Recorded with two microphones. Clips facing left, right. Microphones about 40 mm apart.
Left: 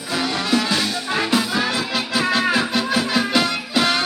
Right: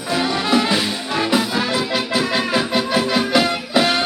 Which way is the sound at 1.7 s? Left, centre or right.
Centre.